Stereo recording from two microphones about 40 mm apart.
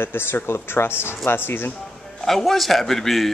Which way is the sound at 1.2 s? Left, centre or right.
Left.